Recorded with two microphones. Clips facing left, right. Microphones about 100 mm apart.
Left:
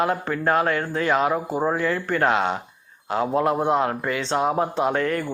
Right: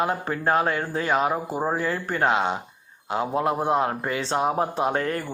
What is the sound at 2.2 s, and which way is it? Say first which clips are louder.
A man's voice: even; 20° right (ahead or behind).